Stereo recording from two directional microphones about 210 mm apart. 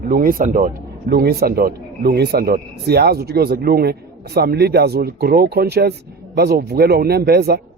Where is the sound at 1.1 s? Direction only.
50° right (ahead or behind).